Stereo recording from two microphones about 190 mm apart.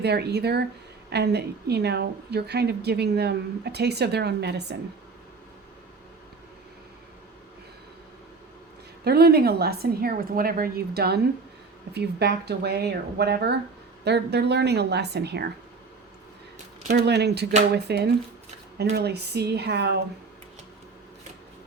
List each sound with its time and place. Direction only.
0.0 s a woman's voice: 60° right (ahead or behind)
9.0 s a woman's voice: 55° right (ahead or behind)
16.9 s a woman's voice: 60° right (ahead or behind)